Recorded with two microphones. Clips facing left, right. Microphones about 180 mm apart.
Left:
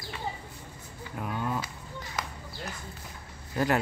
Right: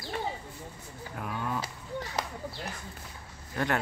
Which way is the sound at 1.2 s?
5° left (ahead or behind).